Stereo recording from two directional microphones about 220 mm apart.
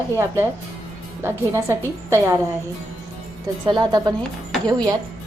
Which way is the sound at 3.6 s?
20° right (ahead or behind).